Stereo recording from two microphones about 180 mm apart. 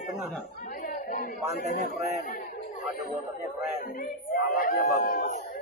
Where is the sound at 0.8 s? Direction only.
55° left (ahead or behind).